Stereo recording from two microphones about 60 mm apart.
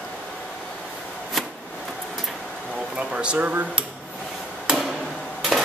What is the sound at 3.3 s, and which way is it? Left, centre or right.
Speech, right.